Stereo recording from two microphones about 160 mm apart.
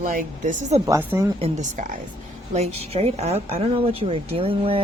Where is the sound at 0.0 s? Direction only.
55° right (ahead or behind).